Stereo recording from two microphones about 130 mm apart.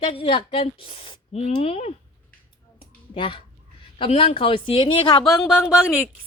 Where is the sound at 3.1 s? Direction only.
40° left (ahead or behind).